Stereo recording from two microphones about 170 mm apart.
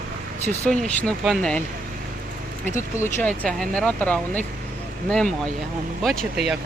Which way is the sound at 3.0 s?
5° left (ahead or behind).